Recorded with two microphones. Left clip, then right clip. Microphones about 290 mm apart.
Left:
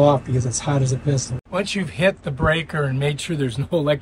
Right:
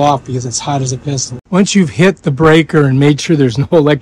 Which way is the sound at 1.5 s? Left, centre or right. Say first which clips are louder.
Right 11 dB; right.